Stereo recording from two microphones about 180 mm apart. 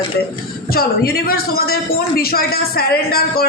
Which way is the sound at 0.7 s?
60° left (ahead or behind).